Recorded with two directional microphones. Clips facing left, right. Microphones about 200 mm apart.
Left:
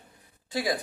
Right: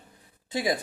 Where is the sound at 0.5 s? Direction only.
20° right (ahead or behind).